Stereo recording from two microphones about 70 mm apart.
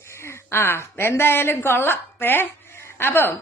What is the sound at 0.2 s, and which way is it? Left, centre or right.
A woman's voice, left.